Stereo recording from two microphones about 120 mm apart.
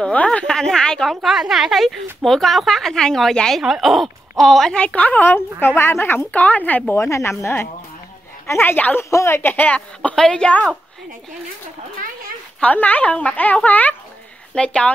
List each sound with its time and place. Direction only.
0.0 s a woman's voice: 10° left (ahead or behind)
12.5 s a woman's voice: 10° left (ahead or behind)